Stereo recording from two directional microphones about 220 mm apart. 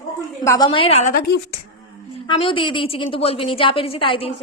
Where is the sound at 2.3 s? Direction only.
25° left (ahead or behind).